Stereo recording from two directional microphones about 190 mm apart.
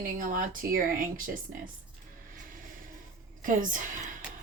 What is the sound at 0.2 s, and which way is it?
Speech, 45° right (ahead or behind).